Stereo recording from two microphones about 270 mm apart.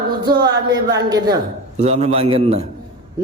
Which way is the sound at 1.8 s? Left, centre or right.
Right.